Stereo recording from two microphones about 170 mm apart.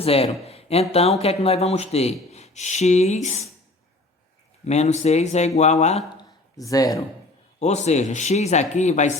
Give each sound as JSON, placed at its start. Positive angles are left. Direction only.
{"t": 0.0, "sound": "speech", "side_deg": 35}
{"t": 4.6, "sound": "speech", "side_deg": 40}
{"t": 6.1, "sound": "a sound", "side_deg": 20}
{"t": 7.6, "sound": "speech", "side_deg": 40}